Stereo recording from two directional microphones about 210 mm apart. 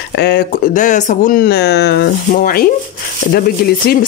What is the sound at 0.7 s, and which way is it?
Speech, 35° left (ahead or behind).